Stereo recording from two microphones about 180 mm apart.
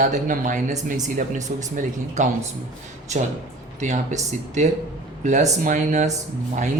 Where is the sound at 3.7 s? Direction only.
40° right (ahead or behind).